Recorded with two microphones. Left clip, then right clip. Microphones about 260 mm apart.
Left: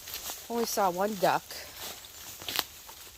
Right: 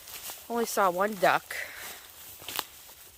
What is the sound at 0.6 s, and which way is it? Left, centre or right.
Speech, right.